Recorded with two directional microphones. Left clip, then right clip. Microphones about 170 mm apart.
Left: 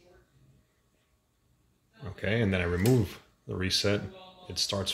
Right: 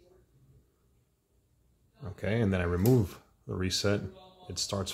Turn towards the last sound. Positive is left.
turn(degrees=0)  # may be behind; listen again after turning